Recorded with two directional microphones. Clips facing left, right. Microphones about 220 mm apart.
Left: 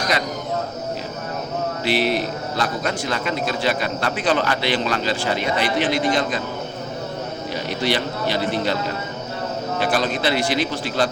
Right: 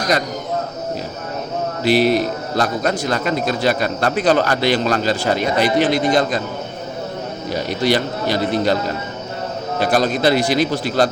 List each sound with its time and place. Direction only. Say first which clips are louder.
1.8 s a man's voice: right 7 dB; 40° right (ahead or behind)
7.5 s a man's voice: right 5 dB; 40° right (ahead or behind)
9.8 s a man's voice: right 6 dB; 40° right (ahead or behind)